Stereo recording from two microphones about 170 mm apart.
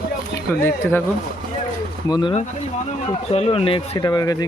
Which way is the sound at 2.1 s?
25° left (ahead or behind).